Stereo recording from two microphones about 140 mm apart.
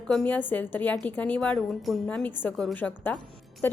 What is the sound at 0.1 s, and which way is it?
Speech, centre (ahead or behind).